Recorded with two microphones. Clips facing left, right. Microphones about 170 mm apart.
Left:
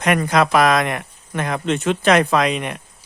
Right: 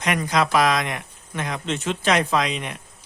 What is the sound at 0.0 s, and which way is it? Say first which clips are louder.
A man's voice: left 5 dB; 55° left (ahead or behind).